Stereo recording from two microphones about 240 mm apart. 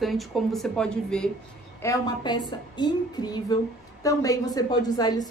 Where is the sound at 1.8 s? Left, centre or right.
Centre.